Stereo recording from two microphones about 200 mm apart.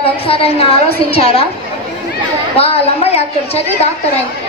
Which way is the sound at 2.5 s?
30° left (ahead or behind).